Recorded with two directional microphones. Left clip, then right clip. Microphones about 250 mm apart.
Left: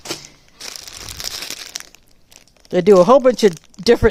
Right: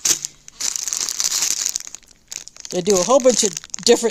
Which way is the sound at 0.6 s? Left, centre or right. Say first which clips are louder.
Right 8 dB; centre.